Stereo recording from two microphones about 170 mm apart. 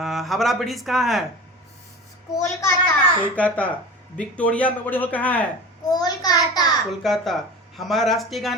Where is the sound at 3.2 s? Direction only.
10° left (ahead or behind).